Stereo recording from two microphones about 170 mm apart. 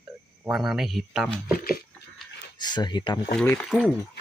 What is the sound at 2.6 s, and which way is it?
Speech, 25° left (ahead or behind).